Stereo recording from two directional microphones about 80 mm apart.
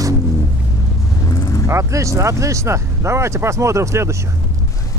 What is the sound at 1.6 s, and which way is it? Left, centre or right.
Speech, right.